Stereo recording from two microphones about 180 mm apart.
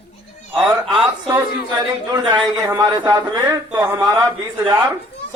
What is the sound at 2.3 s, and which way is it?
A man's voice, 20° right (ahead or behind).